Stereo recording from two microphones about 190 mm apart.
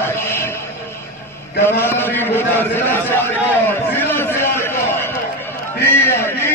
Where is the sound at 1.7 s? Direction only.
10° left (ahead or behind).